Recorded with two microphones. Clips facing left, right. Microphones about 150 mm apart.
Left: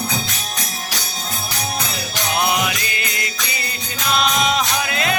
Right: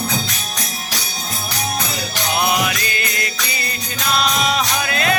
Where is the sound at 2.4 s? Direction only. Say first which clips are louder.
Right 1 dB; 20° left (ahead or behind).